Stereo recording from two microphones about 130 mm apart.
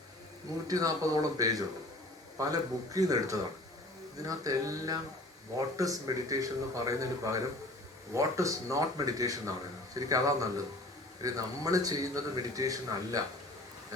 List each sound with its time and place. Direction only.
0.7 s a man's voice: 30° right (ahead or behind)